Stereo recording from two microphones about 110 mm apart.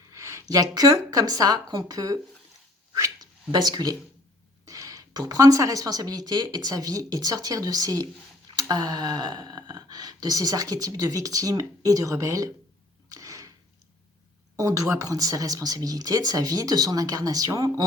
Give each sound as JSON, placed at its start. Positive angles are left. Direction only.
{"t": 0.1, "sound": "speech", "side_deg": -25}
{"t": 13.1, "sound": "a sound", "side_deg": -30}
{"t": 14.5, "sound": "speech", "side_deg": -30}